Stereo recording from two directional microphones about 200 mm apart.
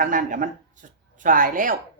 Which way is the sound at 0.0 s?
40° right (ahead or behind).